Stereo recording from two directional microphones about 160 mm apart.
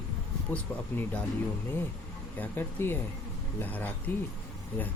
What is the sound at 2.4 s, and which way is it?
Speech, 15° left (ahead or behind).